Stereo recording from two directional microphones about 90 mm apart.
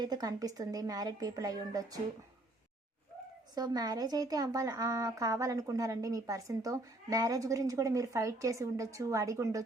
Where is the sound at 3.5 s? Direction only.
45° right (ahead or behind).